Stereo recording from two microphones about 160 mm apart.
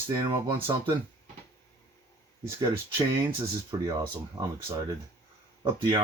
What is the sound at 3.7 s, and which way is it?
Speech, 30° right (ahead or behind).